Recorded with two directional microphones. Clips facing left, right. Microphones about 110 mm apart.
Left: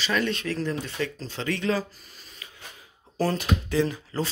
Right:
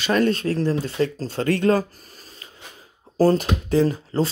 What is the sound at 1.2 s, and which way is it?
Speech, 50° right (ahead or behind).